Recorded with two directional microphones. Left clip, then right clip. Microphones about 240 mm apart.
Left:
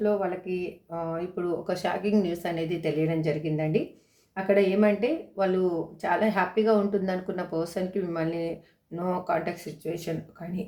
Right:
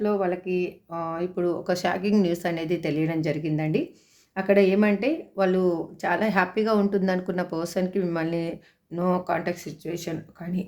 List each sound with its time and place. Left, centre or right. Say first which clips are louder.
0.0 s speech: right 2 dB; right